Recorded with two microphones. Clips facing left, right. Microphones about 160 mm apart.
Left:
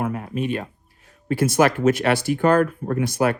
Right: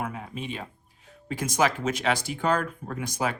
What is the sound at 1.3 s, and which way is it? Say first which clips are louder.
Speech: left 7 dB; 55° left (ahead or behind).